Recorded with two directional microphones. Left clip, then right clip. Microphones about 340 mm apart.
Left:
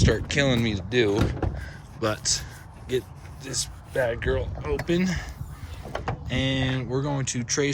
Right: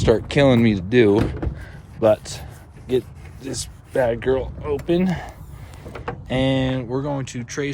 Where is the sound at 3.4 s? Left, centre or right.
Centre.